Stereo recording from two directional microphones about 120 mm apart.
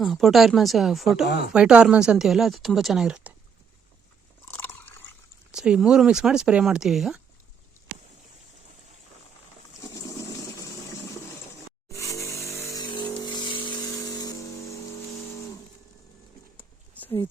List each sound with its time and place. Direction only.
0.0 s speech: centre (ahead or behind)
4.4 s biting: 20° left (ahead or behind)
5.5 s speech: 5° right (ahead or behind)
10.2 s water: 25° left (ahead or behind)
11.9 s vehicle: 25° left (ahead or behind)
16.6 s a sound: 15° left (ahead or behind)